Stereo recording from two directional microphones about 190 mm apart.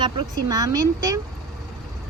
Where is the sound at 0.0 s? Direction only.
20° right (ahead or behind).